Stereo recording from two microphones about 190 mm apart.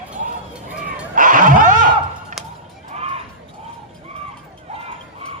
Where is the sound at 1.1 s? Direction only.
45° right (ahead or behind).